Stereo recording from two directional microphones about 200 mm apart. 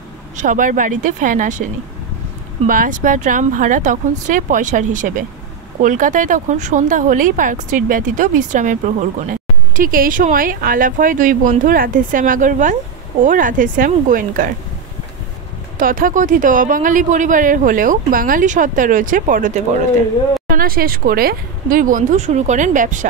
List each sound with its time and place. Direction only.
0.4 s speech: 40° right (ahead or behind)
2.6 s speech: 40° right (ahead or behind)
15.8 s speech: 45° right (ahead or behind)